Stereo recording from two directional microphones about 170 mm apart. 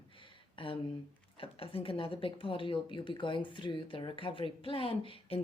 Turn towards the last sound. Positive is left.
turn(degrees=30)  # may be behind; listen again after turning